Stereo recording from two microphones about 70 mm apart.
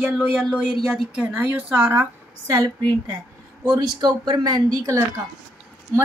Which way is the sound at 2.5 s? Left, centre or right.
Right.